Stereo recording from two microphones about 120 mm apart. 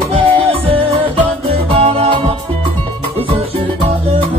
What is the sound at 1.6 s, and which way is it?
Music, 50° right (ahead or behind).